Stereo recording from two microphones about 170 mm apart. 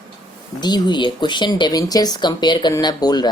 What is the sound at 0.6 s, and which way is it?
Speech, 25° left (ahead or behind).